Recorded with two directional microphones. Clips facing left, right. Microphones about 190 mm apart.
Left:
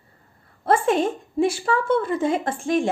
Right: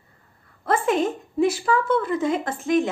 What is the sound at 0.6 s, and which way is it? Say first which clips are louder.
A woman's voice: left 2 dB; 30° left (ahead or behind).